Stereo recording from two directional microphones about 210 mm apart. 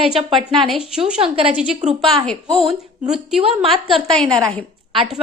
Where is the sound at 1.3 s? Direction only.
25° right (ahead or behind).